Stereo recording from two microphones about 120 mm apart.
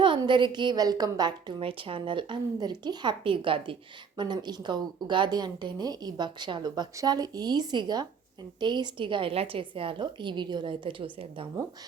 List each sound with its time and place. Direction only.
0.2 s speech: 40° right (ahead or behind)
1.6 s a woman's voice: 45° right (ahead or behind)